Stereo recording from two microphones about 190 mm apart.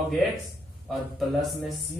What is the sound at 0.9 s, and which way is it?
Speech, centre (ahead or behind).